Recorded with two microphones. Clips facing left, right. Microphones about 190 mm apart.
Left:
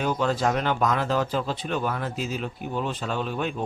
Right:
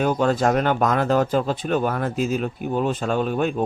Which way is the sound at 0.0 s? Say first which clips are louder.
Right 5 dB; 50° right (ahead or behind).